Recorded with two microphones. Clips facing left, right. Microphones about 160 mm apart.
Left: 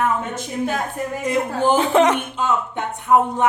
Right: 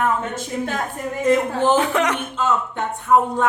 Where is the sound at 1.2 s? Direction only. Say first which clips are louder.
Right 3 dB; 10° left (ahead or behind).